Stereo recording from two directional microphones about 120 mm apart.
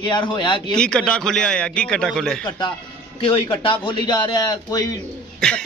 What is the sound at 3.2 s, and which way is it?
Speech, 45° left (ahead or behind).